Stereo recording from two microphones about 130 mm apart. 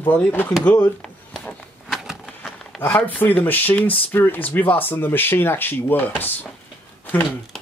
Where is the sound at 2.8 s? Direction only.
15° left (ahead or behind).